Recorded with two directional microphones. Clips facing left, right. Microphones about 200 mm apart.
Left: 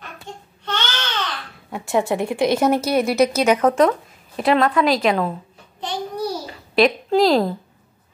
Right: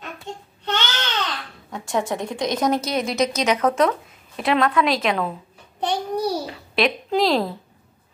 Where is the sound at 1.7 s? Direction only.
10° left (ahead or behind).